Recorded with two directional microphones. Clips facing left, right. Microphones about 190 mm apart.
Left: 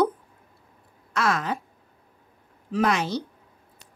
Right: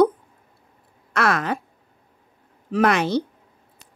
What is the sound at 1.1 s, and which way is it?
Speech, 65° right (ahead or behind).